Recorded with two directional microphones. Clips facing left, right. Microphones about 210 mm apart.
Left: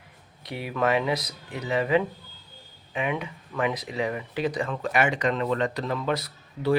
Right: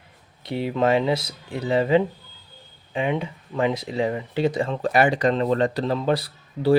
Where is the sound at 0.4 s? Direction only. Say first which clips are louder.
Right 5 dB; 25° right (ahead or behind).